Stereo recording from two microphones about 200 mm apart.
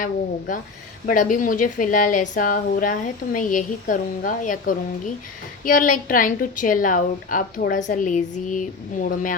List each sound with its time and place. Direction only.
0.0 s a woman's voice: 45° left (ahead or behind)